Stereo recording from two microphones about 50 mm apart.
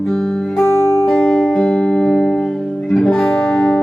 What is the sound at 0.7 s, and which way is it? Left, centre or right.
Music, left.